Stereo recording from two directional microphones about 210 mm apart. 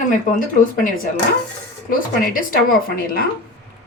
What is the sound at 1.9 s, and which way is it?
Speech, 40° left (ahead or behind).